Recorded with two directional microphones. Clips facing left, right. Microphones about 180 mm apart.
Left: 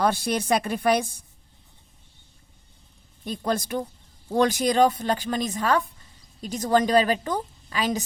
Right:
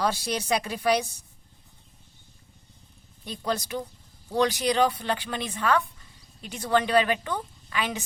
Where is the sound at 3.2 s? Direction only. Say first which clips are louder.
Left 3 dB; 50° left (ahead or behind).